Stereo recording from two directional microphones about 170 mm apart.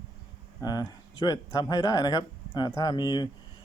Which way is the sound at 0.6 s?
20° left (ahead or behind).